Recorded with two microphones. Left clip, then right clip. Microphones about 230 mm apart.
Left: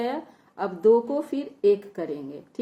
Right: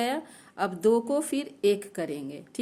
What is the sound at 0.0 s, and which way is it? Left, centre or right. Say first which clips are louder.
A woman's voice: even; right.